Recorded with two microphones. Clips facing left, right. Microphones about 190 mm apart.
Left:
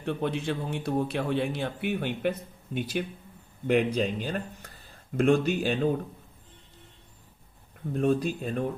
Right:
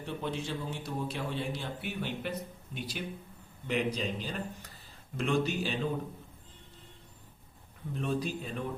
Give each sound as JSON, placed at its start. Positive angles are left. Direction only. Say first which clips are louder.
{"t": 0.0, "sound": "speech", "louder": "left 7 dB", "side_deg": 60}
{"t": 7.9, "sound": "speech", "louder": "left 8 dB", "side_deg": 50}